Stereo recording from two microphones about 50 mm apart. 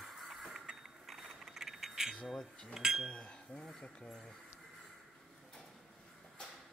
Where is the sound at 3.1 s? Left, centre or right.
Centre.